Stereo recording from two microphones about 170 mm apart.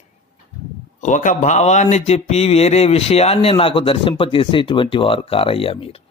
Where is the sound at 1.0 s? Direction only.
50° left (ahead or behind).